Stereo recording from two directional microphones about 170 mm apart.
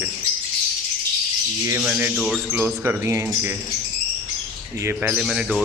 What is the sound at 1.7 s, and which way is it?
Speech, 10° right (ahead or behind).